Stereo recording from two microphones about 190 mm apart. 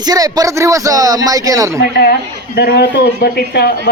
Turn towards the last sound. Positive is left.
turn(degrees=60)  # may be behind; listen again after turning